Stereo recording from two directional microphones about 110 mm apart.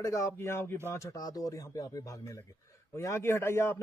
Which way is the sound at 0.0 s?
30° left (ahead or behind).